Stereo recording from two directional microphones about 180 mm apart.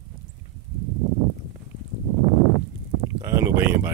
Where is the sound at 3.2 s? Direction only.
15° right (ahead or behind).